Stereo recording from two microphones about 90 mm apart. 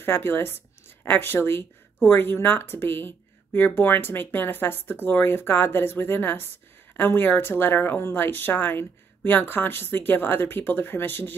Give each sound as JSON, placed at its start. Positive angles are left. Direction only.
{"t": 0.0, "sound": "speech", "side_deg": 25}